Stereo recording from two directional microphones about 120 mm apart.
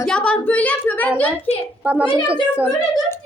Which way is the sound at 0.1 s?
10° left (ahead or behind).